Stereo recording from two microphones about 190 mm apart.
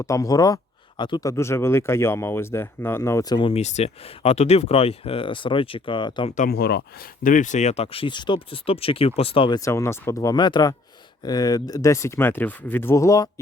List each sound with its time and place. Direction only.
0.0 s speech: 15° left (ahead or behind)
6.3 s speech: 50° left (ahead or behind); by 13.3 s 20° left (ahead or behind)